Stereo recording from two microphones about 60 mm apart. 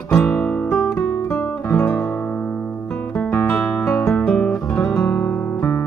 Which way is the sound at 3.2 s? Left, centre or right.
Left.